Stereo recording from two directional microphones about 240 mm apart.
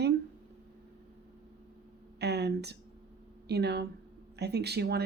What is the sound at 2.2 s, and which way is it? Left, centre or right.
Speech, right.